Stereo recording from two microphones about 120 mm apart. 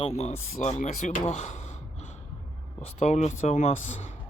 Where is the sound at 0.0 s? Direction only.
60° left (ahead or behind).